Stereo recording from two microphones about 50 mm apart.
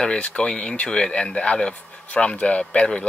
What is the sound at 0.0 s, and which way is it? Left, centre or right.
Speech, left.